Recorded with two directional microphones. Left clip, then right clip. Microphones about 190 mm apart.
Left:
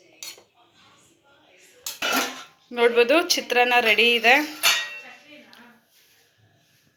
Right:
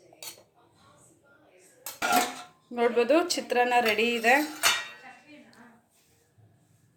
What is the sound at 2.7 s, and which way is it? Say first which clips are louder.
Speech: left 5 dB; centre (ahead or behind).